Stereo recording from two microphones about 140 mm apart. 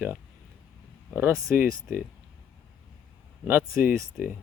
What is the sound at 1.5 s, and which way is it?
Speech, 10° right (ahead or behind).